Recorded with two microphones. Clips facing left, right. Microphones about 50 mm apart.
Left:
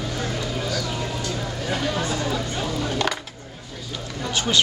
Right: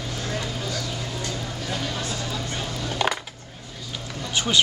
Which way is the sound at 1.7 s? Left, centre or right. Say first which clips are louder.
Left 5 dB; left.